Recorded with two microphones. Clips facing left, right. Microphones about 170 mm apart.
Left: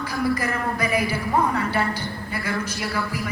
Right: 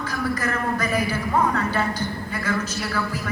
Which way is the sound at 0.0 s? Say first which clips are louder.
Left 2 dB; 10° left (ahead or behind).